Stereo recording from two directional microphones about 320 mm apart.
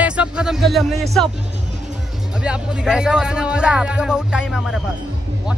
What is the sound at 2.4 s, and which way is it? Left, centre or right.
Speech, centre.